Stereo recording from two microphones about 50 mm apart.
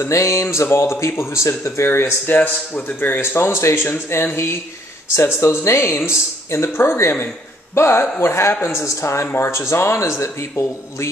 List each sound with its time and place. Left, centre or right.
0.0 s speech: left
1.9 s speech: left
2.3 s speech: left
3.2 s speech: left
5.4 s speech: left
8.7 s speech: left